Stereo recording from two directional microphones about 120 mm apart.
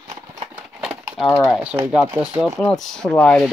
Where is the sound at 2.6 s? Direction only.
5° left (ahead or behind).